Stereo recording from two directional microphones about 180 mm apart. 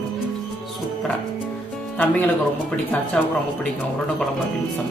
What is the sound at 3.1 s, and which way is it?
Speech, 5° left (ahead or behind).